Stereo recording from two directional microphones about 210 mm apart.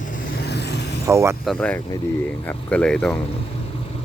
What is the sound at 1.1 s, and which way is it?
Speech, 10° right (ahead or behind).